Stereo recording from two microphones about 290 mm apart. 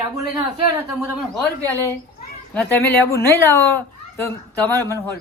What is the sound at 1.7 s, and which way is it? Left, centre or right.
Speech, centre.